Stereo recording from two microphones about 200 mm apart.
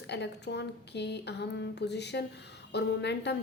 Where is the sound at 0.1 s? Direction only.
60° left (ahead or behind).